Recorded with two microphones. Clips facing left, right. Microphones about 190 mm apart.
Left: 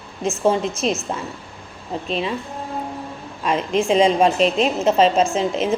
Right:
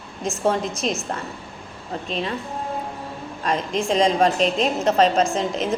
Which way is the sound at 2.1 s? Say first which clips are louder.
Left 3 dB; 5° left (ahead or behind).